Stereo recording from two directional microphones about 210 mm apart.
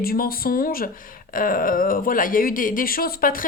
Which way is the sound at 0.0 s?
45° left (ahead or behind).